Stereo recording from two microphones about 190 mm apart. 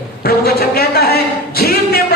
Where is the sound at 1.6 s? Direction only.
55° left (ahead or behind).